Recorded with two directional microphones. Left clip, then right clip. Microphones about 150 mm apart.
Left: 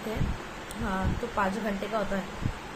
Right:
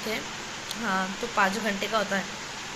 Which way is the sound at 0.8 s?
Centre (ahead or behind).